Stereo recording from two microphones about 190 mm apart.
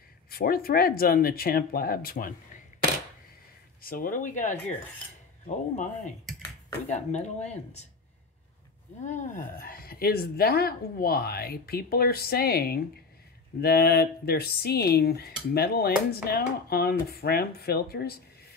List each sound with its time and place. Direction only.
0.3 s speech: 50° left (ahead or behind)
3.8 s speech: 45° left (ahead or behind)
6.9 s speech: 35° left (ahead or behind)
9.0 s speech: 40° left (ahead or behind)